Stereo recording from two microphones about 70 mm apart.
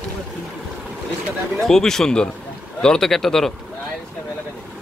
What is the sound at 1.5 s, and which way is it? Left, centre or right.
Speech, centre.